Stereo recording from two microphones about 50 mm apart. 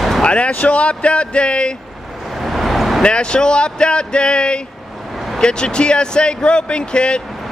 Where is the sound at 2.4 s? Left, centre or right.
Centre.